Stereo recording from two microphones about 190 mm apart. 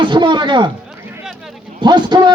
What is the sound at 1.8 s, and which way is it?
Speech, 25° right (ahead or behind).